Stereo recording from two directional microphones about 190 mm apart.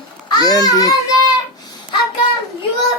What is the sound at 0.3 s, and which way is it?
Speech, 20° left (ahead or behind).